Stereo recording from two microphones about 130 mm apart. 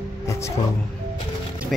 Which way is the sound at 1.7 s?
Centre (ahead or behind).